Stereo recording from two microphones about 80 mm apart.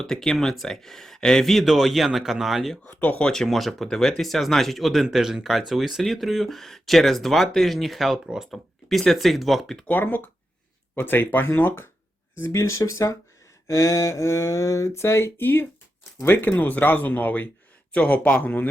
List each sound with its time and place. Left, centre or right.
0.0 s speech: centre
2.8 s speech: left; by 9.8 s centre
9.8 s speech: left
12.4 s a sound: left
16.1 s speech: left